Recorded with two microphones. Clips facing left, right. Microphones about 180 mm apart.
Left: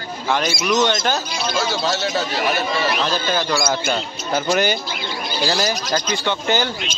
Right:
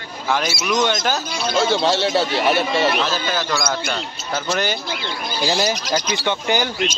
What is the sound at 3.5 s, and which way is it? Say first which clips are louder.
Speech: left 3 dB; 10° left (ahead or behind).